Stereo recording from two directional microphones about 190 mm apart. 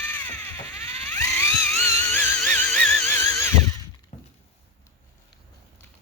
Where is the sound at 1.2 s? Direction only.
15° left (ahead or behind).